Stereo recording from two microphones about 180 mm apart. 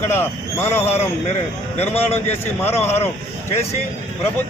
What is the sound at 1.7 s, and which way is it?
A man's voice, 35° left (ahead or behind).